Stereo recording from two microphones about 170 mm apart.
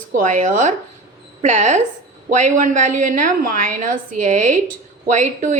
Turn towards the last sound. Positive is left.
turn(degrees=-45)  # may be behind; listen again after turning